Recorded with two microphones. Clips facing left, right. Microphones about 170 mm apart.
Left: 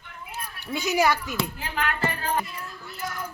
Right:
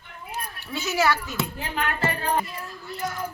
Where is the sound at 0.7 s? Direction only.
15° left (ahead or behind).